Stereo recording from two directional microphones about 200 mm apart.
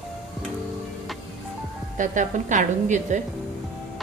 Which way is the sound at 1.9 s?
40° right (ahead or behind).